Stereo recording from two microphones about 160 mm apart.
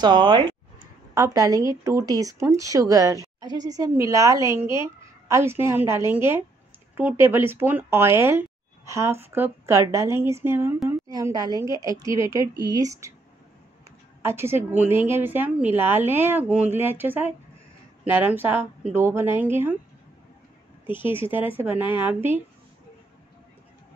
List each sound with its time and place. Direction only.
0.0 s speech: 30° right (ahead or behind)
14.2 s speech: 15° right (ahead or behind)
20.8 s a woman's voice: 15° right (ahead or behind)